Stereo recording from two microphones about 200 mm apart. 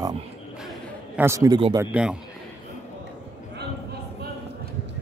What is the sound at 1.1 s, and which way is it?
Speech, 10° right (ahead or behind).